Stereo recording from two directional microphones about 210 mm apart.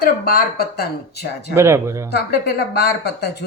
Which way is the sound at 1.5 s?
10° right (ahead or behind).